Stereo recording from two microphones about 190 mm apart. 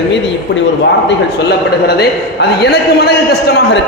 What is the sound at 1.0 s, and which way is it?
A man's voice, 60° left (ahead or behind).